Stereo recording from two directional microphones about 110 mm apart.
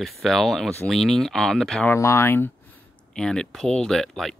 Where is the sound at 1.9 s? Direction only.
25° left (ahead or behind).